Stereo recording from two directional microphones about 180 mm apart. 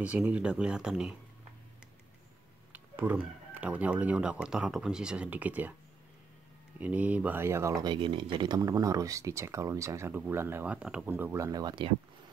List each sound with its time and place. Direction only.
0.0 s speech: 5° right (ahead or behind)
2.7 s speech: 10° right (ahead or behind)
6.8 s speech: 10° right (ahead or behind); by 11.9 s 25° right (ahead or behind)